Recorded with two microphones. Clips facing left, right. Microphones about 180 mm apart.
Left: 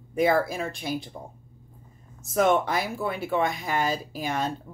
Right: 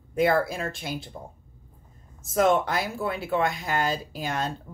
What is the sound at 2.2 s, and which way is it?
A woman's voice, centre (ahead or behind).